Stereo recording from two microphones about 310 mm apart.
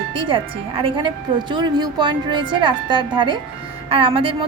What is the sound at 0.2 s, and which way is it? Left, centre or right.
A woman's voice, centre.